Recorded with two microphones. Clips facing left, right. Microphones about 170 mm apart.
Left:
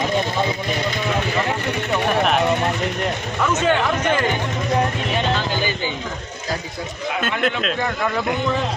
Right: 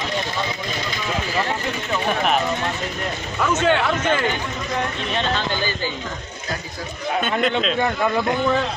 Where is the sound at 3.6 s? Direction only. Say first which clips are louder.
Even; 10° left (ahead or behind).